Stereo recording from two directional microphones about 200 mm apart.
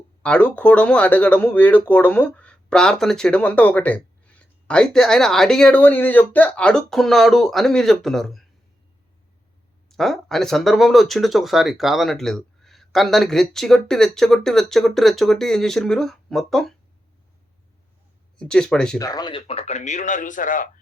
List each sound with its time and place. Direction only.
0.2 s speech: 5° left (ahead or behind)
9.9 s speech: centre (ahead or behind)
18.3 s speech: 5° left (ahead or behind)
18.9 s speech: 20° left (ahead or behind); by 20.7 s 40° left (ahead or behind)